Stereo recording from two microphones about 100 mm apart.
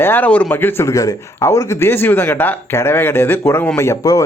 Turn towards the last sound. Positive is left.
turn(degrees=30)  # may be behind; listen again after turning